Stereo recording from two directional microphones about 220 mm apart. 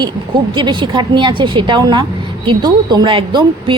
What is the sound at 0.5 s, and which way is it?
Speech, 20° right (ahead or behind).